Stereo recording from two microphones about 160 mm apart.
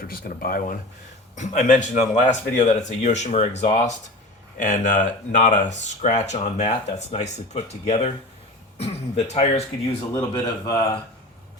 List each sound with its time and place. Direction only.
0.0 s speech: 65° left (ahead or behind)
1.4 s speech: 50° left (ahead or behind)
10.2 s speech: 20° left (ahead or behind)